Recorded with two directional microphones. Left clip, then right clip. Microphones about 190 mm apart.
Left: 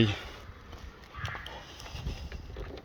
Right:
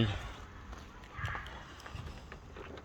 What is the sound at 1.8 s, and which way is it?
Vehicle, 30° left (ahead or behind).